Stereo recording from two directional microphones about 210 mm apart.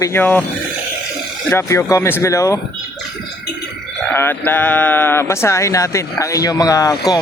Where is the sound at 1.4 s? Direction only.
10° left (ahead or behind).